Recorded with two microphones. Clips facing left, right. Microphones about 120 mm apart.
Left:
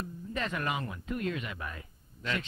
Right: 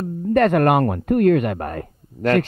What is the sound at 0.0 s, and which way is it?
Speech, 60° right (ahead or behind).